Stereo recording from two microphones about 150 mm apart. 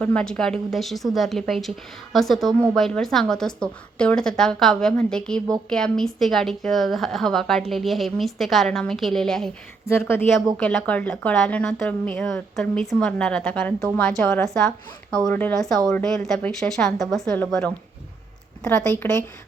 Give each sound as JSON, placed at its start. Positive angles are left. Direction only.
{"t": 0.0, "sound": "a woman's voice", "side_deg": 5}
{"t": 9.8, "sound": "speech", "side_deg": 15}
{"t": 10.6, "sound": "a woman's voice", "side_deg": 5}
{"t": 14.4, "sound": "a woman's voice", "side_deg": 0}
{"t": 19.0, "sound": "speech", "side_deg": 15}